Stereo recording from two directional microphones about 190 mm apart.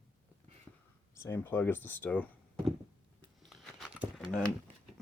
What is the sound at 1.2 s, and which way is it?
Speech, 10° left (ahead or behind).